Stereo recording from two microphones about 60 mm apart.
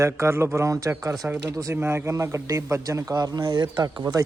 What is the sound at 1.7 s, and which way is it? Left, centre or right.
A man's voice, right.